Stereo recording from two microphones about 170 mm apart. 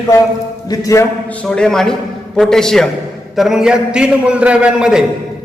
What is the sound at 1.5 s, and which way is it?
A man's voice, 5° left (ahead or behind).